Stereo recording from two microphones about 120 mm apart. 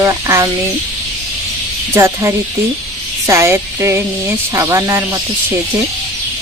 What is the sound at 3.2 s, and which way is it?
Music, 25° right (ahead or behind).